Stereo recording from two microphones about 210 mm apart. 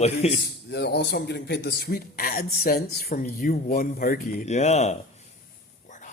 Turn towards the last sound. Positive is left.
turn(degrees=35)  # may be behind; listen again after turning